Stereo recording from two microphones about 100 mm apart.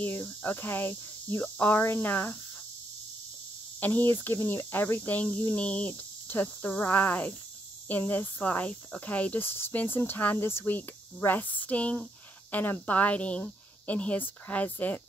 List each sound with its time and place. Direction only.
0.0 s speech: 20° left (ahead or behind)
3.8 s speech: 20° left (ahead or behind)